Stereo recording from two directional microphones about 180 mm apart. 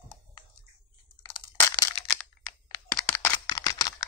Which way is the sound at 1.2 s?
20° left (ahead or behind).